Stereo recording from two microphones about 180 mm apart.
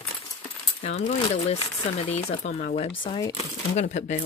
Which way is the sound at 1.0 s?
35° left (ahead or behind).